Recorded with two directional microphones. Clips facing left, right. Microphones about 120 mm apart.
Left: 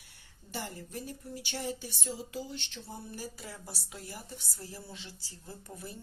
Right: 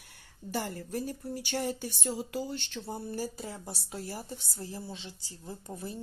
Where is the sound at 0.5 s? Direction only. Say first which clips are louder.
Right 6 dB; 50° right (ahead or behind).